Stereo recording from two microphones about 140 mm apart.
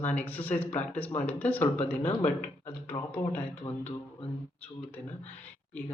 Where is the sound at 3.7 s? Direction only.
30° left (ahead or behind).